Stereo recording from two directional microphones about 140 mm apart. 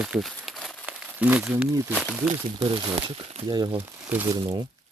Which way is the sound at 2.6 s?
35° right (ahead or behind).